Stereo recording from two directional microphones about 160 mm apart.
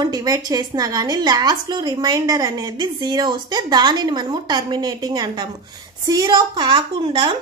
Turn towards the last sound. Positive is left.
turn(degrees=-30)  # may be behind; listen again after turning